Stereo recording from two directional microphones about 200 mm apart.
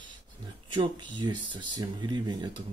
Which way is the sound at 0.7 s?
25° right (ahead or behind).